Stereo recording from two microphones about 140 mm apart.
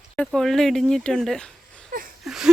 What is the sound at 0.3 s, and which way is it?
Speech, 5° left (ahead or behind).